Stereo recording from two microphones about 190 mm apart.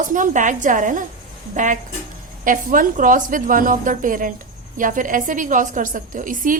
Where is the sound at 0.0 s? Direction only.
40° right (ahead or behind).